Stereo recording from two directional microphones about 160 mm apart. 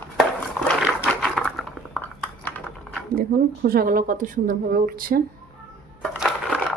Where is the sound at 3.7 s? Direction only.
65° right (ahead or behind).